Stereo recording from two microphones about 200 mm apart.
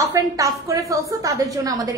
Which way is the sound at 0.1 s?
15° right (ahead or behind).